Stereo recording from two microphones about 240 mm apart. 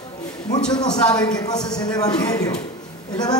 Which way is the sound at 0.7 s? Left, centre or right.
Centre.